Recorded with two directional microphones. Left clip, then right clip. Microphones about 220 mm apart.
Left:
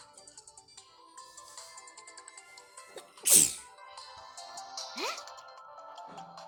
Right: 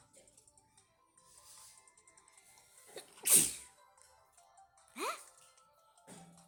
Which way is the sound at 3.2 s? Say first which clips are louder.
Left 7 dB; 15° left (ahead or behind).